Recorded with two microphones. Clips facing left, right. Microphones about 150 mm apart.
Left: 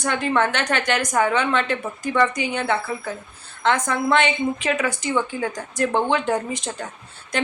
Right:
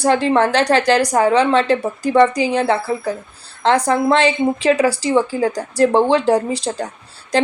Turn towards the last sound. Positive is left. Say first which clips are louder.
# right 8 dB
turn(degrees=-35)  # may be behind; listen again after turning